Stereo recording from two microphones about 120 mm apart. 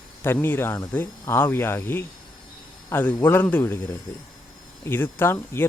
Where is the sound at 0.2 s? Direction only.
20° left (ahead or behind).